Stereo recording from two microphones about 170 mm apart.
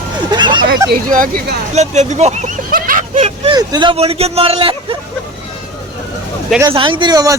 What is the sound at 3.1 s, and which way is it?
Vehicle, 40° right (ahead or behind).